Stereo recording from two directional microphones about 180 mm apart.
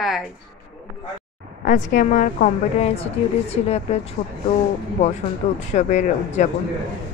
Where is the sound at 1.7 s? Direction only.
45° left (ahead or behind).